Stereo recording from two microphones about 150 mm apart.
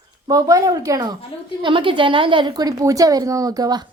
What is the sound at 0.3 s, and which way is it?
A woman's voice, 25° right (ahead or behind).